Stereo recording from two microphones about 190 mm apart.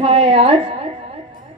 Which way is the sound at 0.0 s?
30° right (ahead or behind).